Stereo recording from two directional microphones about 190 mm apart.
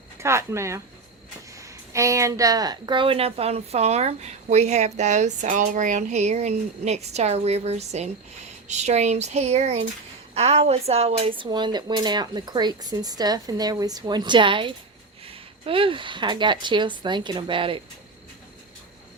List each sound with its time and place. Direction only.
0.2 s speech: 15° right (ahead or behind)
1.9 s a woman's voice: 15° right (ahead or behind)